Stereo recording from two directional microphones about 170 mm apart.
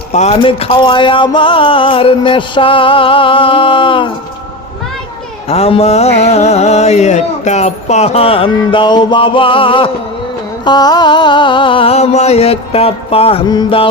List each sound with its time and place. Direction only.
0.1 s music: 40° left (ahead or behind)
5.5 s music: 35° left (ahead or behind)